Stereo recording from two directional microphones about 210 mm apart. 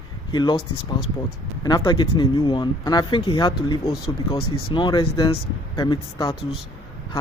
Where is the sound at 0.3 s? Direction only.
20° left (ahead or behind).